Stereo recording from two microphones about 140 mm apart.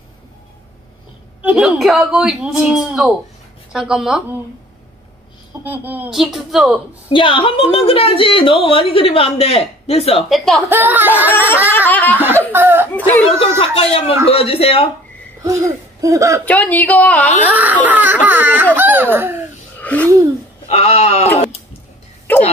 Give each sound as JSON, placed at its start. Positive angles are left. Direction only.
{"t": 1.4, "sound": "speech", "side_deg": -5}
{"t": 5.6, "sound": "speech", "side_deg": -10}
{"t": 7.1, "sound": "speech", "side_deg": 35}
{"t": 10.1, "sound": "speech", "side_deg": 0}
{"t": 10.7, "sound": "speech", "side_deg": -15}
{"t": 11.2, "sound": "speech", "side_deg": 15}
{"t": 12.5, "sound": "speech", "side_deg": -15}
{"t": 12.9, "sound": "speech", "side_deg": 15}
{"t": 13.4, "sound": "speech", "side_deg": 40}
{"t": 15.4, "sound": "speech", "side_deg": -20}
{"t": 16.4, "sound": "speech", "side_deg": 10}
{"t": 17.5, "sound": "speech", "side_deg": -10}
{"t": 19.8, "sound": "a sound", "side_deg": 10}
{"t": 20.6, "sound": "speech", "side_deg": 50}